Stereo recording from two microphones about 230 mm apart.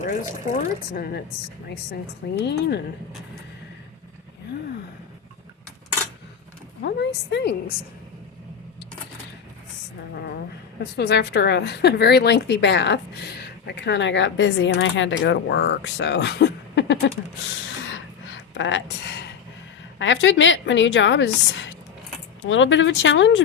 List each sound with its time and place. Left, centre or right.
0.0 s speech: left
2.4 s a woman's voice: left
6.8 s a woman's voice: left
10.9 s a woman's voice: left
18.5 s a sound: left
20.0 s a woman's voice: left
22.4 s a woman's voice: left